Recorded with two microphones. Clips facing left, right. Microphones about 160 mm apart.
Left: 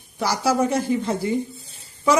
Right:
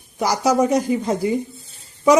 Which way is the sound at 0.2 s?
15° right (ahead or behind).